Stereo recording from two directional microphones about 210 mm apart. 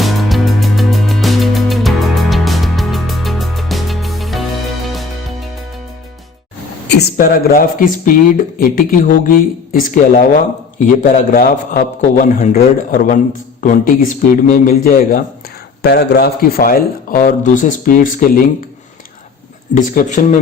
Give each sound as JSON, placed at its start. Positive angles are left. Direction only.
{"t": 0.0, "sound": "music", "side_deg": 0}
{"t": 6.8, "sound": "speech", "side_deg": 50}
{"t": 19.7, "sound": "speech", "side_deg": 40}